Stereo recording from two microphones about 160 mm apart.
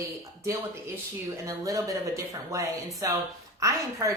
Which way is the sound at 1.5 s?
20° right (ahead or behind).